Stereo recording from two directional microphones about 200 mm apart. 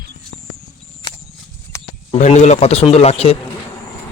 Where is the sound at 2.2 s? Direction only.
35° left (ahead or behind).